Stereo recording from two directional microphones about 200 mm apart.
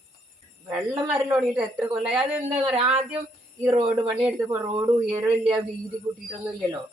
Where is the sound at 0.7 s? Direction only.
10° right (ahead or behind).